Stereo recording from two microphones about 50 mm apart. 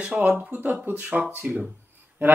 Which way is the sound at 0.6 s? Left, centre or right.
Right.